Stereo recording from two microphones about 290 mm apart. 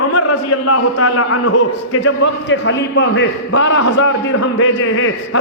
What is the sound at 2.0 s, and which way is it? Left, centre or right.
A man's voice, left.